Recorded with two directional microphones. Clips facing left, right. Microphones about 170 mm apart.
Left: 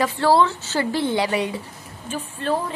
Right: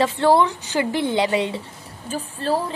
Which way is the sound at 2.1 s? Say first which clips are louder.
Right 1 dB; 35° right (ahead or behind).